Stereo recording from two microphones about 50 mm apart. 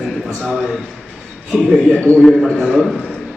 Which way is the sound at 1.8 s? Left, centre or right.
Left.